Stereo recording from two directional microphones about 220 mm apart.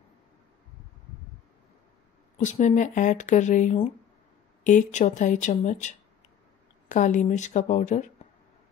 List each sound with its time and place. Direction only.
2.3 s speech: 30° left (ahead or behind)